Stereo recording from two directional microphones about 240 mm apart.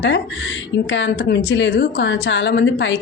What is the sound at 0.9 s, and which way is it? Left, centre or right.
A woman's voice, left.